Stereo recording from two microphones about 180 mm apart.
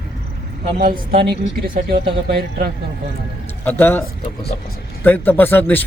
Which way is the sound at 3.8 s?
10° left (ahead or behind).